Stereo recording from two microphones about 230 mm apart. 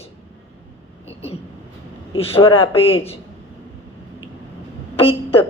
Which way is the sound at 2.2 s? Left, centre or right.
Left.